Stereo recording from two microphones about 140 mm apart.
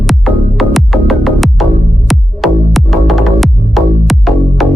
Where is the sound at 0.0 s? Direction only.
Centre (ahead or behind).